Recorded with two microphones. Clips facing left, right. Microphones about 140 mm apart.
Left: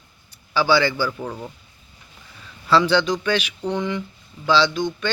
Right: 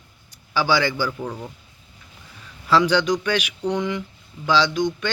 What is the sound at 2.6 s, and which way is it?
Speech, 15° right (ahead or behind).